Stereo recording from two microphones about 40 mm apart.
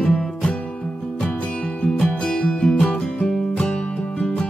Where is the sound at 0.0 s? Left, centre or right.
Left.